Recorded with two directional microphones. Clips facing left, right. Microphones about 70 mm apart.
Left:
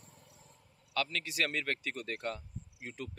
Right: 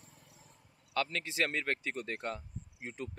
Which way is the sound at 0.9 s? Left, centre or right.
Right.